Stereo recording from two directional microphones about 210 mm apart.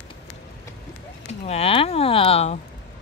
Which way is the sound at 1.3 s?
30° left (ahead or behind).